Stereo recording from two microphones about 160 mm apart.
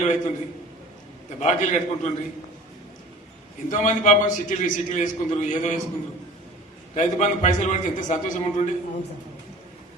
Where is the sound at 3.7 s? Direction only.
50° left (ahead or behind).